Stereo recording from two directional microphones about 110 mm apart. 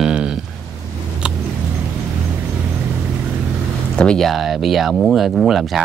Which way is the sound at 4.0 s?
5° left (ahead or behind).